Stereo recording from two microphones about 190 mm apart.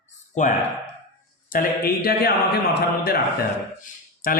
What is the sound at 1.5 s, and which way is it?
Speech, 50° left (ahead or behind).